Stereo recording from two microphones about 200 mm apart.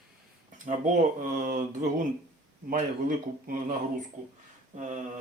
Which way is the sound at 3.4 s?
40° right (ahead or behind).